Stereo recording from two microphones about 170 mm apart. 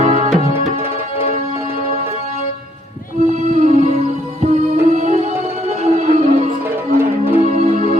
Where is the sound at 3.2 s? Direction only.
40° right (ahead or behind).